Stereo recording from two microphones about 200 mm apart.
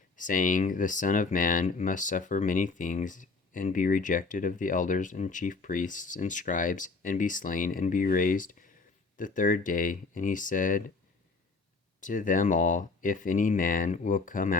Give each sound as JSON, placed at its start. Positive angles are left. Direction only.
{"t": 0.2, "sound": "speech", "side_deg": 40}
{"t": 11.9, "sound": "speech", "side_deg": 40}